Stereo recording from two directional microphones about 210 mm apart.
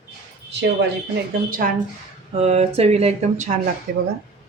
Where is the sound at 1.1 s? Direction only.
40° right (ahead or behind).